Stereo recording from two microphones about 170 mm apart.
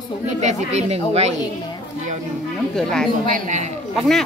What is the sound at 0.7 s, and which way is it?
Speech, 40° right (ahead or behind).